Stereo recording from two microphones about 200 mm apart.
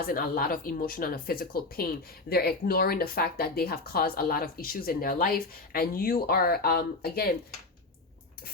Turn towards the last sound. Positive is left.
turn(degrees=50)  # may be behind; listen again after turning